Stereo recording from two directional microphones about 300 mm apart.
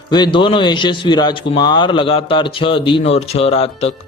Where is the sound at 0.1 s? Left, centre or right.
Centre.